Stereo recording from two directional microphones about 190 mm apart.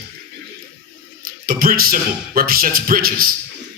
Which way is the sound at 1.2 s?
50° right (ahead or behind).